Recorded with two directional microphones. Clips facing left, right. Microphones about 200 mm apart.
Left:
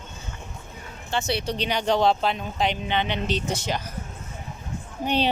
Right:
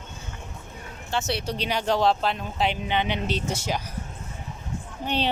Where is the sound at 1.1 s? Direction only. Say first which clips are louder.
Left 1 dB; centre (ahead or behind).